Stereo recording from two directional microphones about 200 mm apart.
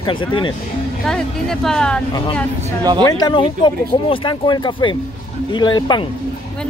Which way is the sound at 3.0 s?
20° left (ahead or behind).